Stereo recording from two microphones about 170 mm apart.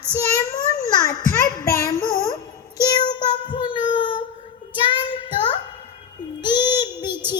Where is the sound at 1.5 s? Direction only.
20° left (ahead or behind).